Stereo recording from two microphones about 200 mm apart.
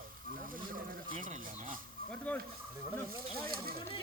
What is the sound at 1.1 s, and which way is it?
Speech, 45° right (ahead or behind).